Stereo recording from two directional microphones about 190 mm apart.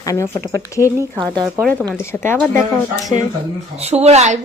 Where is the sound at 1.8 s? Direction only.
10° left (ahead or behind).